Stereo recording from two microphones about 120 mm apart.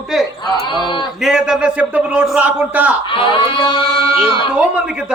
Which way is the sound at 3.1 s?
45° left (ahead or behind).